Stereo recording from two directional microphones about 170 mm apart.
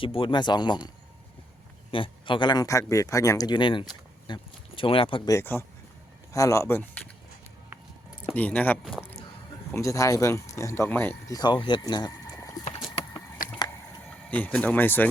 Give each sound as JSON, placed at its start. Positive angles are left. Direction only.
{"t": 0.0, "sound": "speech", "side_deg": 30}
{"t": 1.9, "sound": "speech", "side_deg": 30}
{"t": 5.3, "sound": "speech", "side_deg": 15}
{"t": 8.4, "sound": "speech", "side_deg": 10}
{"t": 11.3, "sound": "speech", "side_deg": 25}
{"t": 14.1, "sound": "speech", "side_deg": 10}